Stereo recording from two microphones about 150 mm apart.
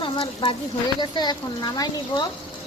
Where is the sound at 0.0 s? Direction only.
40° left (ahead or behind).